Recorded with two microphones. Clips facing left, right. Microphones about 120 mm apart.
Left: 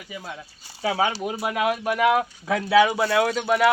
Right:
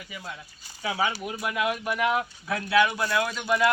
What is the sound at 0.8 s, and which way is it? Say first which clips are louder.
Speech: left 4 dB; 90° left.